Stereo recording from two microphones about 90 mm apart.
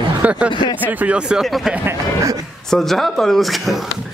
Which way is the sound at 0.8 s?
15° right (ahead or behind).